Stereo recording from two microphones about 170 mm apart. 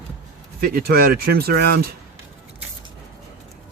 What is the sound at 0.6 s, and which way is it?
Speech, 60° right (ahead or behind).